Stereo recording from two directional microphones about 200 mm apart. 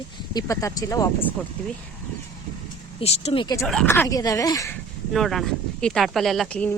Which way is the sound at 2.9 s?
30° left (ahead or behind).